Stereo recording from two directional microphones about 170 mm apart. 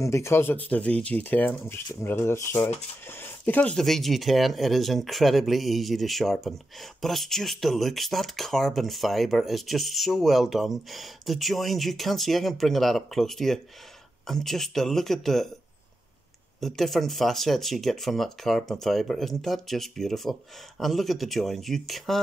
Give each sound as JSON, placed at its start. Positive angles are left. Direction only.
{"t": 0.0, "sound": "speech", "side_deg": 15}
{"t": 16.6, "sound": "speech", "side_deg": 0}